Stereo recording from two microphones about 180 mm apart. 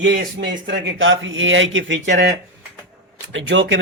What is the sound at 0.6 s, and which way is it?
Speech, 90° right.